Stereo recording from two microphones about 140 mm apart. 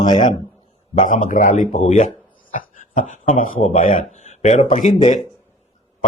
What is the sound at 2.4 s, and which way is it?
Speech, 70° left (ahead or behind).